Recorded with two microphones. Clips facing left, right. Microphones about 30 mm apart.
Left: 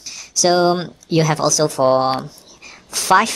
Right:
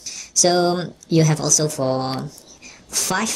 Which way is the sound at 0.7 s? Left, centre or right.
Centre.